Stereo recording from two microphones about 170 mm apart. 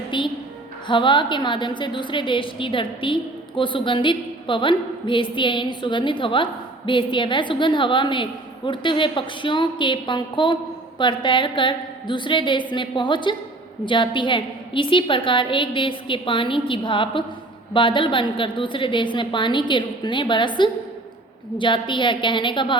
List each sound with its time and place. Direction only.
0.1 s a woman's voice: 30° left (ahead or behind)